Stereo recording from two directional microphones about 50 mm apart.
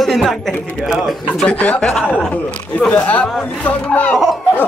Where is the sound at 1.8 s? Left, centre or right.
Centre.